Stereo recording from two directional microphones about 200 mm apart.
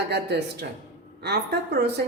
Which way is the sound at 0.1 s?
55° right (ahead or behind).